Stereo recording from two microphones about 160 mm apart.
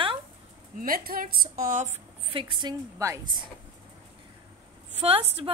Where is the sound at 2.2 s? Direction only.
30° right (ahead or behind).